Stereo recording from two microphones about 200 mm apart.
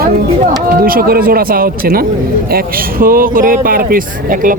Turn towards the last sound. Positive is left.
turn(degrees=-45)  # may be behind; listen again after turning